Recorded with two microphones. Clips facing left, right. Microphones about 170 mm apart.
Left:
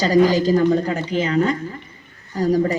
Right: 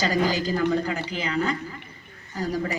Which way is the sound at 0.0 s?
35° left (ahead or behind).